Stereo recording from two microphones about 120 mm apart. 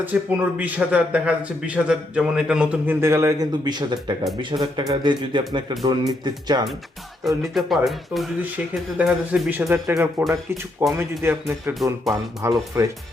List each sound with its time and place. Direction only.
0.0 s a man's voice: 15° right (ahead or behind); by 6.6 s 35° right (ahead or behind)
7.3 s speech: centre (ahead or behind)
9.0 s a man's voice: 10° right (ahead or behind); by 12.9 s 25° right (ahead or behind)